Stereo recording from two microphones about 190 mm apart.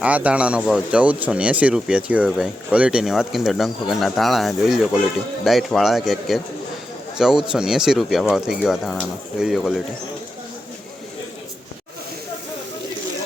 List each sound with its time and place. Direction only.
0.0 s speech: 5° right (ahead or behind)